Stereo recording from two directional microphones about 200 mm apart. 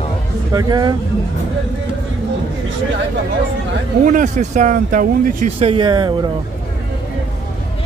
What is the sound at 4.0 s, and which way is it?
Speech, 40° right (ahead or behind).